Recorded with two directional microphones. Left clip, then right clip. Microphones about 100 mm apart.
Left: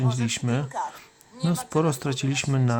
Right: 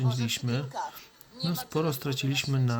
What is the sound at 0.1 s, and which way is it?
Speech, 45° left (ahead or behind).